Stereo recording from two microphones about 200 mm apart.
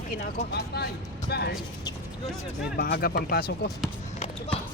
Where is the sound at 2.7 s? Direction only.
50° left (ahead or behind).